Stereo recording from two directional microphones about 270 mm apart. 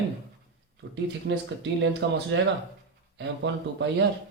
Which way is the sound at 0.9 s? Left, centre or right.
Right.